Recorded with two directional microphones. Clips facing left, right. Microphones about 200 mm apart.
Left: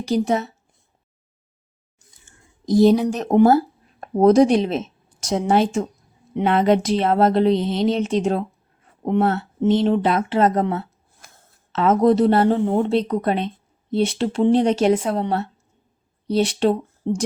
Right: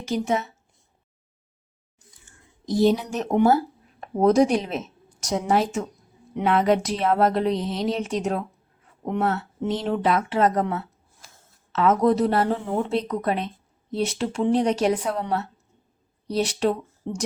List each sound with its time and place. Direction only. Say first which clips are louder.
0.0 s speech: left 4 dB; 35° left (ahead or behind)
2.6 s speech: left 6 dB; 40° left (ahead or behind)
11.2 s a sound: left 2 dB; 55° left (ahead or behind)
11.7 s speech: left 3 dB; 25° left (ahead or behind)